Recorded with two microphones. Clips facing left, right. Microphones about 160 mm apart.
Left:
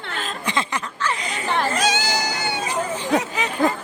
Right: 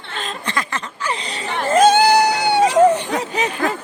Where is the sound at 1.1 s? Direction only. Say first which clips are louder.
Right 1 dB; 30° right (ahead or behind).